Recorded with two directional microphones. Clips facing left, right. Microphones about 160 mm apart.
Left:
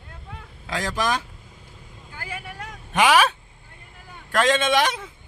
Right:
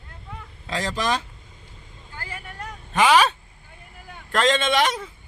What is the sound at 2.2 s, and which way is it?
Vehicle, 10° left (ahead or behind).